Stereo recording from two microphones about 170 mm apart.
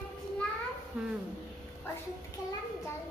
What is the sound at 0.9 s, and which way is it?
Speech, 5° right (ahead or behind).